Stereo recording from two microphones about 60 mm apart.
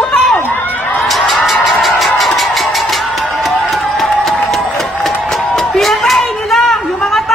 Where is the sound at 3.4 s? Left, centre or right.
Centre.